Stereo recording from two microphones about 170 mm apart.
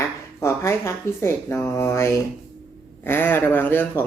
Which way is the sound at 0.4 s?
15° left (ahead or behind).